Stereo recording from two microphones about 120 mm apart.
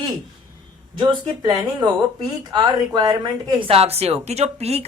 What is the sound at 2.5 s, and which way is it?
A woman's voice, 35° right (ahead or behind).